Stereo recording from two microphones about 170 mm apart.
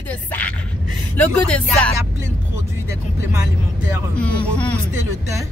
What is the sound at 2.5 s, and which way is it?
Music, 15° right (ahead or behind).